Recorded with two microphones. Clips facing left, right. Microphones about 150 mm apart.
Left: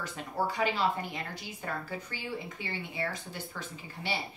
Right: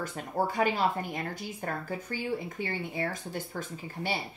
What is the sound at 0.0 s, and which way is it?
A woman's voice, 50° right (ahead or behind).